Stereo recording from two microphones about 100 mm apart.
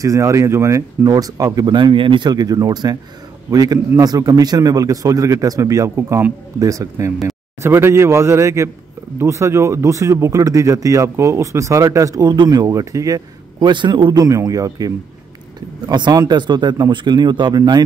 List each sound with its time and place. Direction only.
0.0 s speech: 30° right (ahead or behind)
13.7 s speech: 50° right (ahead or behind)
14.2 s speech: 35° right (ahead or behind)